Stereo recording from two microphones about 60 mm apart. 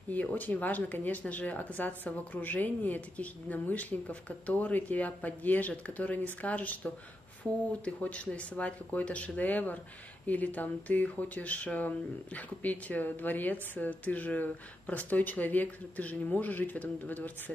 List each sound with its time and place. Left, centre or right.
0.1 s speech: left